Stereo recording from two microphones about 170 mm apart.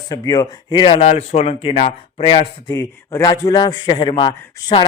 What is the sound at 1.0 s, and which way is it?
Speech, 40° left (ahead or behind).